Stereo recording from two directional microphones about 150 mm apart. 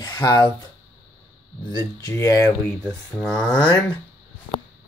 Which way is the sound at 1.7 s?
20° left (ahead or behind).